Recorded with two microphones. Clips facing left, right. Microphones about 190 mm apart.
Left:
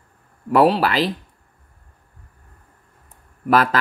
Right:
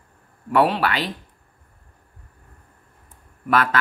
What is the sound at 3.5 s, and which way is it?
Speech, 35° left (ahead or behind).